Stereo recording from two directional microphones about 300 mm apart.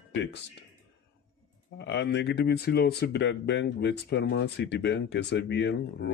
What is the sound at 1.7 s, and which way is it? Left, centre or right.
Speech, left.